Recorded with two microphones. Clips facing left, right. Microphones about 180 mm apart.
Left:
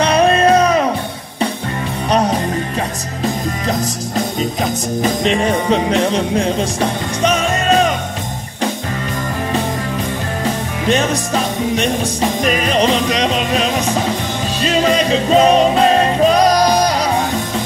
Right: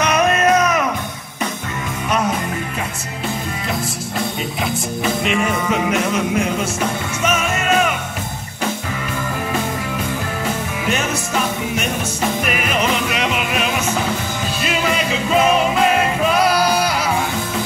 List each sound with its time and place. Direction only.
0.0 s music: 30° left (ahead or behind)
2.0 s music: 35° left (ahead or behind)
10.9 s music: 35° left (ahead or behind)